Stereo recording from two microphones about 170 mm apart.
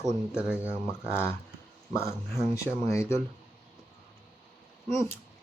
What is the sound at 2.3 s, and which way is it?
Speech, 15° left (ahead or behind).